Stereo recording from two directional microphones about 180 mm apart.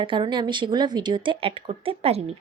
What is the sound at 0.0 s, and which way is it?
A woman's voice, 25° right (ahead or behind).